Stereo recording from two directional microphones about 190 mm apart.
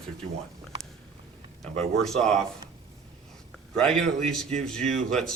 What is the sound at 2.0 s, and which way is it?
Speech, centre (ahead or behind).